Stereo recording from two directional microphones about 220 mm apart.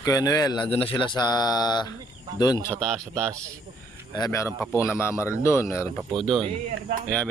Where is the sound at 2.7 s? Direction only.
5° left (ahead or behind).